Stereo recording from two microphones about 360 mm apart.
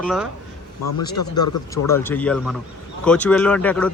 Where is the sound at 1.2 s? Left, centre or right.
Left.